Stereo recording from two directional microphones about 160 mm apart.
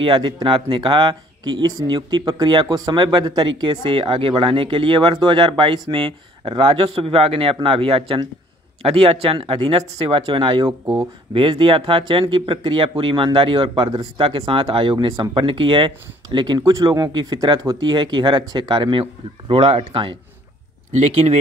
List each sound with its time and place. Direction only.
0.0 s speech: 30° right (ahead or behind)